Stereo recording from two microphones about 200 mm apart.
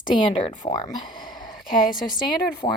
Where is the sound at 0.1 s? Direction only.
25° left (ahead or behind).